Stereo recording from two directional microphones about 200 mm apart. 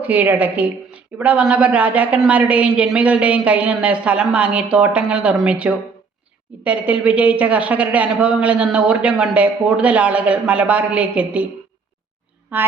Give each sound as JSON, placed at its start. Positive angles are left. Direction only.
{"t": 0.0, "sound": "a woman's voice", "side_deg": -10}
{"t": 12.5, "sound": "a woman's voice", "side_deg": -10}